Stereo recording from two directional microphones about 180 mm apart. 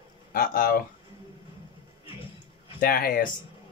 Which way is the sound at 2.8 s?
55° left (ahead or behind).